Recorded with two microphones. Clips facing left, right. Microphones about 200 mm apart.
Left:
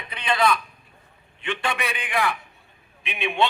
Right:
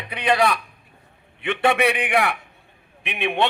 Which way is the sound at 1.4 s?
60° right (ahead or behind).